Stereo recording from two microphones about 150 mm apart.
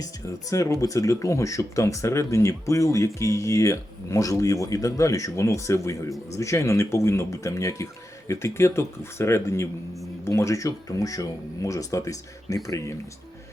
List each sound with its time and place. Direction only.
0.5 s speech: 20° left (ahead or behind)